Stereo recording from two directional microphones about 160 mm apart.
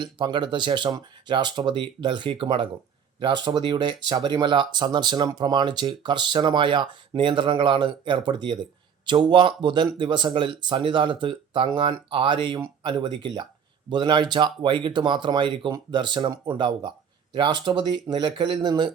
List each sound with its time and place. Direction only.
0.0 s speech: 30° right (ahead or behind)